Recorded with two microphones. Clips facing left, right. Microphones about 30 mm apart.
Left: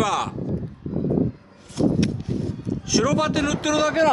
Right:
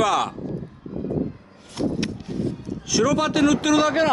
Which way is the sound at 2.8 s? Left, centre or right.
Centre.